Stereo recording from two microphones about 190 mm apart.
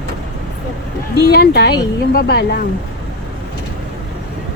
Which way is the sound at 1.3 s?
55° left (ahead or behind).